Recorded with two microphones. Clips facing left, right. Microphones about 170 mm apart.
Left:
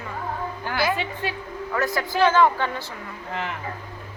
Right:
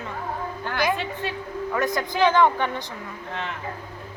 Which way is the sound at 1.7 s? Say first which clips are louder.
Left 1 dB; 20° right (ahead or behind).